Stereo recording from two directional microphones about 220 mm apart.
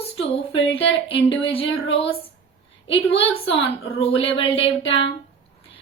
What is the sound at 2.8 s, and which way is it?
A woman's voice, 25° left (ahead or behind).